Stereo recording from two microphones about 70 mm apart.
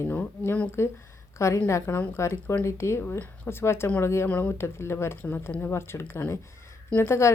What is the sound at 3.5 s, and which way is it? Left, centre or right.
Speech, left.